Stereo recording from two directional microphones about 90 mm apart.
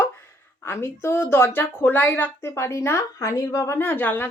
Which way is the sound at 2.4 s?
30° left (ahead or behind).